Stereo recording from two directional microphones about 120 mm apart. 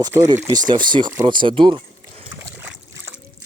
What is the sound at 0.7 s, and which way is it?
Speech, 40° right (ahead or behind).